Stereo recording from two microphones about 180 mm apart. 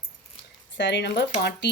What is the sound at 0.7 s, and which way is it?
Speech, 85° left.